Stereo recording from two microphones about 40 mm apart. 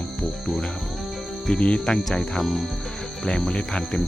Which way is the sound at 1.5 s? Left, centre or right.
Centre.